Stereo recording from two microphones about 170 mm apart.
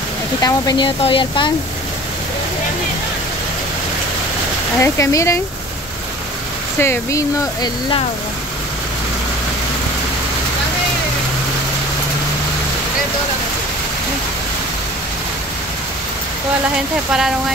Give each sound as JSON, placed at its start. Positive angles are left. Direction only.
{"t": 0.4, "sound": "speech", "side_deg": 20}
{"t": 4.7, "sound": "speech", "side_deg": 15}
{"t": 6.8, "sound": "speech", "side_deg": 15}